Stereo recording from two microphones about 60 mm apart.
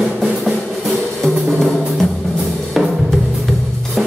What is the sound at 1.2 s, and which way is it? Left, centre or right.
Drum, centre.